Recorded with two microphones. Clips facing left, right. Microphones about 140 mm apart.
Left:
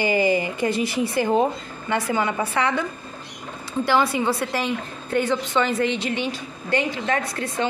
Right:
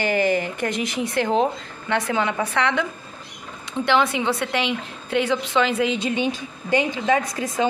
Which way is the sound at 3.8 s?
5° left (ahead or behind).